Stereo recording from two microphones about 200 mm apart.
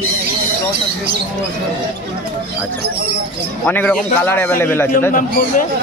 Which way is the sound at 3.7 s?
10° left (ahead or behind).